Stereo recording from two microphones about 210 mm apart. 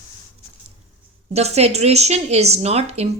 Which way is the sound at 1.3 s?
30° right (ahead or behind).